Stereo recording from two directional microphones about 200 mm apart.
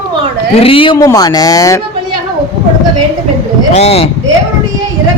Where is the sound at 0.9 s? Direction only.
15° left (ahead or behind).